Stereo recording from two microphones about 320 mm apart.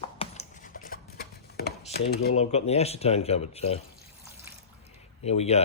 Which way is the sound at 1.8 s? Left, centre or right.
Left.